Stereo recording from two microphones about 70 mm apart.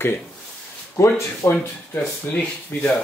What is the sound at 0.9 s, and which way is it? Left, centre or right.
Speech, left.